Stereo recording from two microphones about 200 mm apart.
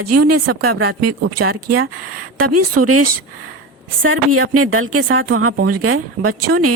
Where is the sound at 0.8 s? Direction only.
90° right.